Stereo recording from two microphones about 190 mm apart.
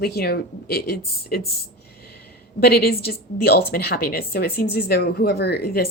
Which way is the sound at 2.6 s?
55° left (ahead or behind).